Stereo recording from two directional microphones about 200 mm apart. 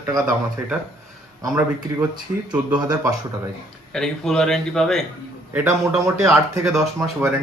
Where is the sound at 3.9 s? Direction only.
Centre (ahead or behind).